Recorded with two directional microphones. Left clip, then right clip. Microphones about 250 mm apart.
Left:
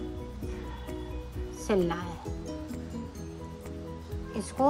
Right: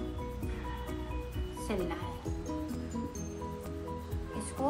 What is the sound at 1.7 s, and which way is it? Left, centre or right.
Speech, centre.